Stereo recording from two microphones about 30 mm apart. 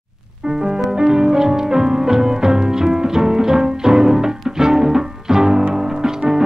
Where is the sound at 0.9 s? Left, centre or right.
Right.